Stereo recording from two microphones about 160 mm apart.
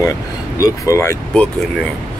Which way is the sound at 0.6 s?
20° left (ahead or behind).